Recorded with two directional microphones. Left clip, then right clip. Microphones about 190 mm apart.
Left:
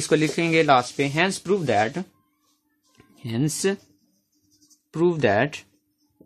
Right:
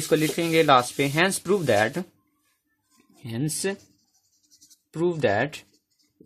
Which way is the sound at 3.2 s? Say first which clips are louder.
Left 4 dB; 35° left (ahead or behind).